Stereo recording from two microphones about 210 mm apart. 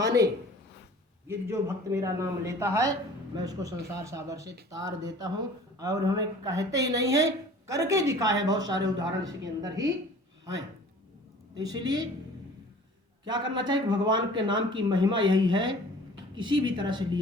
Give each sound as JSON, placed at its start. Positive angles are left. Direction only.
{"t": 0.0, "sound": "a sound", "side_deg": -15}
{"t": 1.3, "sound": "a woman's voice", "side_deg": -10}
{"t": 11.5, "sound": "speech", "side_deg": -20}
{"t": 13.2, "sound": "a woman's voice", "side_deg": -20}